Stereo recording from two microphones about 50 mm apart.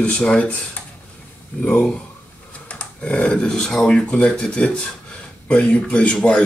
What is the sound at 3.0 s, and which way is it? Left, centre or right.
Speech, centre.